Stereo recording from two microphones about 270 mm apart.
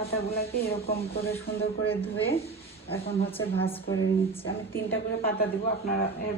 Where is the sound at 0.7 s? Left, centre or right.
Left.